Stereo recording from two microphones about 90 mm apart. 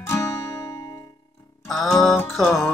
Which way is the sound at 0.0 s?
30° left (ahead or behind).